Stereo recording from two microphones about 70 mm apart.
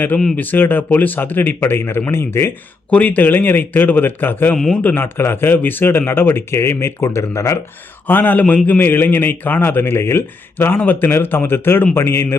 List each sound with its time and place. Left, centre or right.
0.3 s a man's voice: left
2.9 s a man's voice: left
4.5 s speech: centre
4.8 s speech: left
8.0 s a man's voice: left